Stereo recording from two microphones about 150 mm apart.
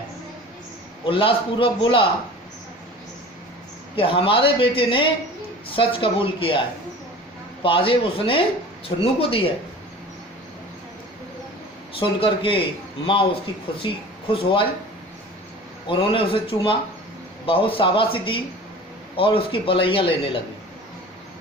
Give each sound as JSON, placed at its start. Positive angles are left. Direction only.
{"t": 1.0, "sound": "a man's voice", "side_deg": 35}
{"t": 3.9, "sound": "a man's voice", "side_deg": 35}
{"t": 7.6, "sound": "a man's voice", "side_deg": 35}
{"t": 11.9, "sound": "a man's voice", "side_deg": 35}
{"t": 13.7, "sound": "speech", "side_deg": 35}
{"t": 15.9, "sound": "a man's voice", "side_deg": 35}